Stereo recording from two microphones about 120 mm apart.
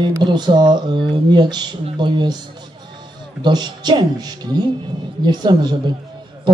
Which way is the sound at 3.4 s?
35° right (ahead or behind).